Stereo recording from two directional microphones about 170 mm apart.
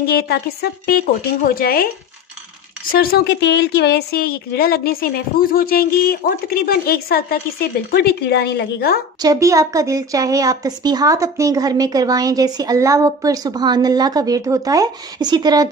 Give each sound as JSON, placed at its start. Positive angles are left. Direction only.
{"t": 0.0, "sound": "a woman's voice", "side_deg": 65}
{"t": 2.9, "sound": "a woman's voice", "side_deg": 60}
{"t": 9.2, "sound": "a woman's voice", "side_deg": -20}